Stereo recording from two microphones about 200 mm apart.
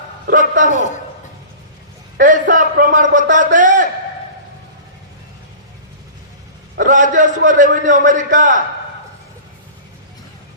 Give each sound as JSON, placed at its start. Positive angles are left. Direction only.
{"t": 0.3, "sound": "a man's voice", "side_deg": -40}
{"t": 0.7, "sound": "a man's voice", "side_deg": 35}
{"t": 2.1, "sound": "a sound", "side_deg": -40}
{"t": 6.7, "sound": "a man's voice", "side_deg": -40}